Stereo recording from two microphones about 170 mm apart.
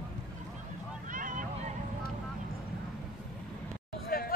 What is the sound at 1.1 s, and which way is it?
Vehicle, 50° right (ahead or behind).